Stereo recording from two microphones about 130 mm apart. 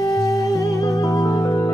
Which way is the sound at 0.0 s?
30° left (ahead or behind).